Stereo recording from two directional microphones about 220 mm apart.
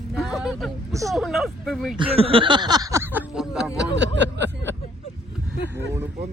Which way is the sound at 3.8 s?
50° right (ahead or behind).